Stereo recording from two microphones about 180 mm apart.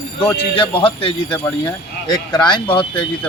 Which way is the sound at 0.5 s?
30° left (ahead or behind).